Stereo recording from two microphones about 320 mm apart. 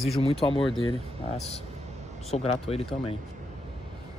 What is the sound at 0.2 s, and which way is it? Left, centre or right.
Speech, centre.